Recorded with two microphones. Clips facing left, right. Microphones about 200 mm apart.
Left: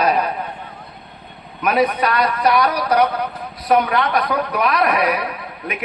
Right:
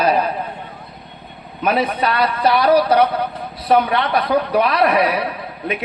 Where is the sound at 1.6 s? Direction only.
25° right (ahead or behind).